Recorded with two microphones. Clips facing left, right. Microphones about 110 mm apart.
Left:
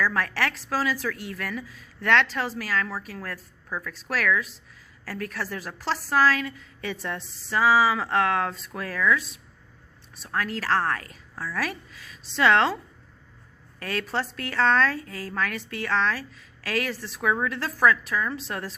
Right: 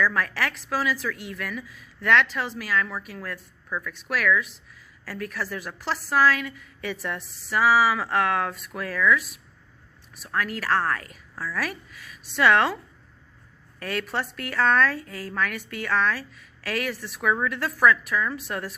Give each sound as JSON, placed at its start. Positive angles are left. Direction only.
{"t": 0.0, "sound": "a woman's voice", "side_deg": 35}
{"t": 13.8, "sound": "a woman's voice", "side_deg": 30}